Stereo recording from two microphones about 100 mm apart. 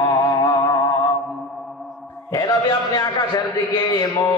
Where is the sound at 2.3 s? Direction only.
40° left (ahead or behind).